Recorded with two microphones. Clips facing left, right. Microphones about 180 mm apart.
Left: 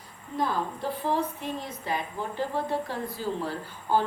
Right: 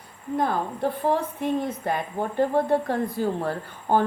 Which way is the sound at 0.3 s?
55° right (ahead or behind).